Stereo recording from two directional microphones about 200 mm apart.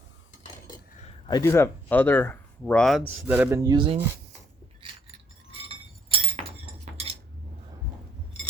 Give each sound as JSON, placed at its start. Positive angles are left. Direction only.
{"t": 1.3, "sound": "speech", "side_deg": 15}
{"t": 3.1, "sound": "speech", "side_deg": -10}
{"t": 5.5, "sound": "chink", "side_deg": -30}